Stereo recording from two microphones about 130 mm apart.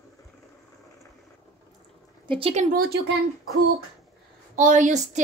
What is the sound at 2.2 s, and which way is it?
Speech, 45° right (ahead or behind).